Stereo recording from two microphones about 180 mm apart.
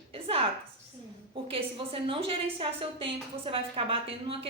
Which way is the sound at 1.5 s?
30° right (ahead or behind).